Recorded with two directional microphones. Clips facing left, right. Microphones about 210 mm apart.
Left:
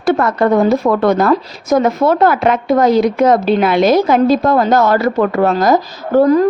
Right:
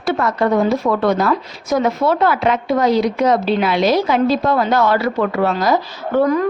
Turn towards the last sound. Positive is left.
turn(degrees=35)  # may be behind; listen again after turning